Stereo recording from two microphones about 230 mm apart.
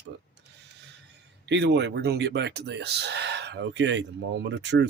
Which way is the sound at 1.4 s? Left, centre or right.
Right.